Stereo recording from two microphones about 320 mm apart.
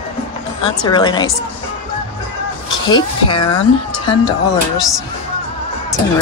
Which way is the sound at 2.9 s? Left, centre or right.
Centre.